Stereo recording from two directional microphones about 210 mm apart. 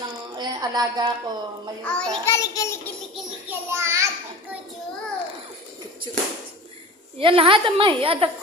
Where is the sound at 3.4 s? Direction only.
15° right (ahead or behind).